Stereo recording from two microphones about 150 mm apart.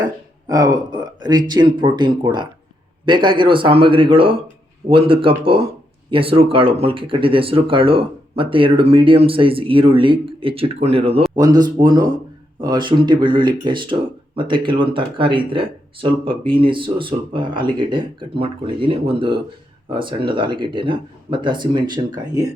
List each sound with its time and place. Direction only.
0.0 s speech: 25° right (ahead or behind)
11.3 s speech: 25° right (ahead or behind)